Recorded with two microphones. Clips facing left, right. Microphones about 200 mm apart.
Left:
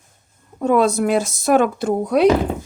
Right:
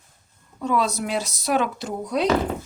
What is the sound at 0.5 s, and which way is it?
Speech, 50° left (ahead or behind).